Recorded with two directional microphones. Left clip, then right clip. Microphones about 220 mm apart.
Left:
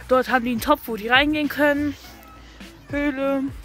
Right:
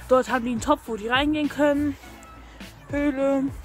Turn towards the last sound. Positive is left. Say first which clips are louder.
# even
turn(degrees=0)  # may be behind; listen again after turning